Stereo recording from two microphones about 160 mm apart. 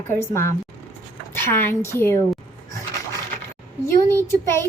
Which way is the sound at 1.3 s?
15° left (ahead or behind).